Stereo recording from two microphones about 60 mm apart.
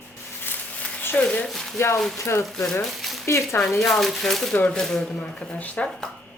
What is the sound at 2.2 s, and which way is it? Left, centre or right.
Speech, left.